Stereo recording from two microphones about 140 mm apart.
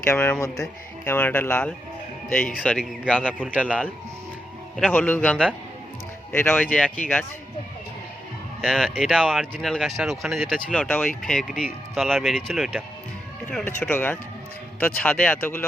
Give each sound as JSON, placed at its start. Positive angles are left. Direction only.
{"t": 0.1, "sound": "speech", "side_deg": 20}
{"t": 3.5, "sound": "speech", "side_deg": -10}
{"t": 4.9, "sound": "speech", "side_deg": 15}
{"t": 8.6, "sound": "speech", "side_deg": 0}